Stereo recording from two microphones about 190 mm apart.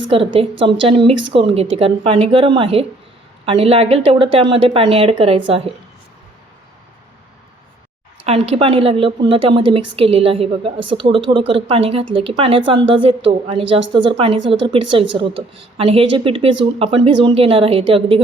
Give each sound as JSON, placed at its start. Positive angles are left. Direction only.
{"t": 0.3, "sound": "speech", "side_deg": -30}
{"t": 8.3, "sound": "speech", "side_deg": -30}